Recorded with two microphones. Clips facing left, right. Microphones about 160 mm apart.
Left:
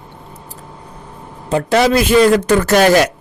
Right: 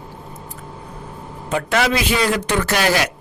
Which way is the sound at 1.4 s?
35° left (ahead or behind).